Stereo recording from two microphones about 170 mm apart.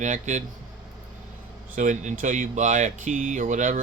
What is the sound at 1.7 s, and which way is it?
Speech, 45° right (ahead or behind).